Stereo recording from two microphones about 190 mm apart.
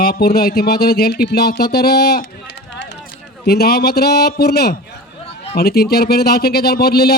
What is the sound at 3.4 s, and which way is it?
Speech, 55° left (ahead or behind).